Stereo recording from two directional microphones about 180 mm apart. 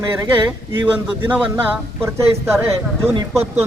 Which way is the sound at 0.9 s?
10° right (ahead or behind).